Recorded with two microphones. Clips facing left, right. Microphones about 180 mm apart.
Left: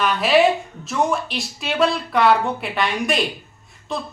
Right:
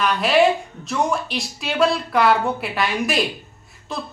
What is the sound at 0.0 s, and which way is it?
A woman's voice, centre (ahead or behind).